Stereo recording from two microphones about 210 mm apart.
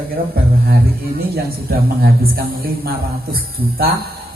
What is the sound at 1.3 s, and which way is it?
A man's voice, 45° right (ahead or behind).